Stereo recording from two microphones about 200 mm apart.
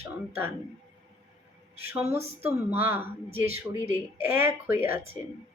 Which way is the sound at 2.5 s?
10° right (ahead or behind).